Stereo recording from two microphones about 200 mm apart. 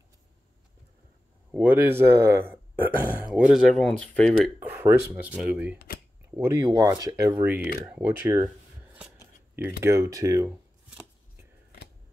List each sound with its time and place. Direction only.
1.5 s speech: 10° right (ahead or behind)
4.6 s a sound: 10° right (ahead or behind)
5.1 s speech: 5° right (ahead or behind)
9.8 s speech: 15° right (ahead or behind)